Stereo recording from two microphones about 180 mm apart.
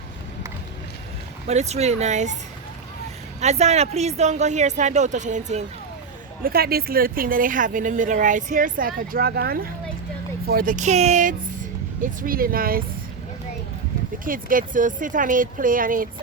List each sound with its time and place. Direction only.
1.5 s speech: 35° right (ahead or behind)
3.4 s speech: 40° right (ahead or behind)
6.4 s speech: 55° right (ahead or behind)
12.2 s speech: 55° right (ahead or behind)
14.3 s speech: 50° right (ahead or behind)